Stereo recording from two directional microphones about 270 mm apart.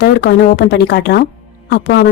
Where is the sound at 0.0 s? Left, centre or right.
Left.